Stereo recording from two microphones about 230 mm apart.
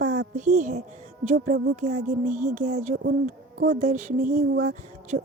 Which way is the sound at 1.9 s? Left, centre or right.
Right.